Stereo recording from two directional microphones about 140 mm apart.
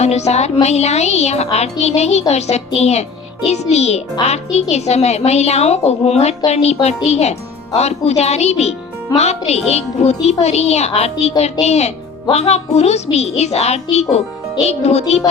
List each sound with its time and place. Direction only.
0.0 s a woman's voice: 50° left (ahead or behind)